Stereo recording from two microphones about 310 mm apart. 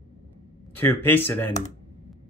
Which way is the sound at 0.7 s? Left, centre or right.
Centre.